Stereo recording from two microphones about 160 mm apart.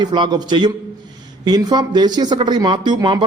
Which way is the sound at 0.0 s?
25° right (ahead or behind).